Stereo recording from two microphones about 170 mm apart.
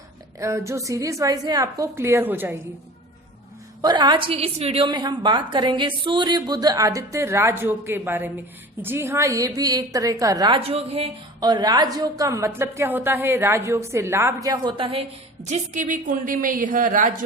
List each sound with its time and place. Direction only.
0.3 s a woman's voice: 20° right (ahead or behind)
3.8 s a woman's voice: 25° right (ahead or behind)
4.9 s a woman's voice: 25° right (ahead or behind)
11.3 s a woman's voice: 25° right (ahead or behind)
15.4 s a woman's voice: 45° right (ahead or behind)